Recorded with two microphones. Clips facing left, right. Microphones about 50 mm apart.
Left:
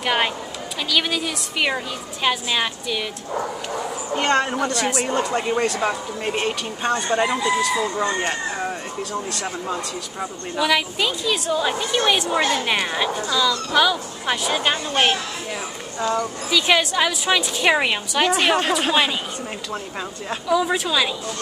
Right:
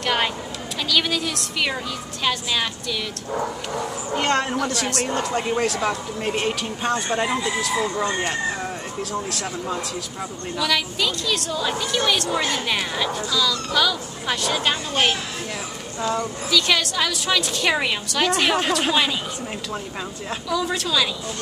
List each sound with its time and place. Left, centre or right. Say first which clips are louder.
0.0 s a sound: left 1 dB; centre
0.8 s a woman's voice: even; centre
4.1 s speech: left 2 dB; centre
10.6 s a woman's voice: left 3 dB; centre
16.4 s a woman's voice: left 2 dB; centre
20.4 s a woman's voice: left 4 dB; centre